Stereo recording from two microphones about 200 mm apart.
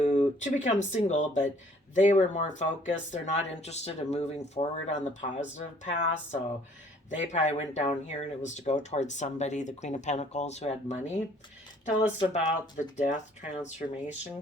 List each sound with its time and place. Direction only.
0.0 s speech: 35° left (ahead or behind)
12.3 s speech: 35° left (ahead or behind)